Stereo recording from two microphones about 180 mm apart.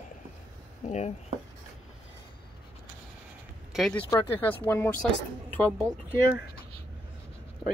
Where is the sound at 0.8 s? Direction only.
40° left (ahead or behind).